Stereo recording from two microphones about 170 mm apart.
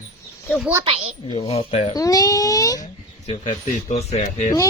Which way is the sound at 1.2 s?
30° left (ahead or behind).